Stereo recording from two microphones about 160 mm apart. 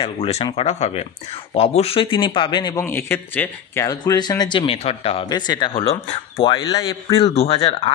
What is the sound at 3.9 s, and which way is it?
Speech, 25° left (ahead or behind).